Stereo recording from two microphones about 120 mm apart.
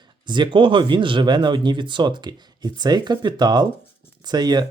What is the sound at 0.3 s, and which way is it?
Speech, 40° right (ahead or behind).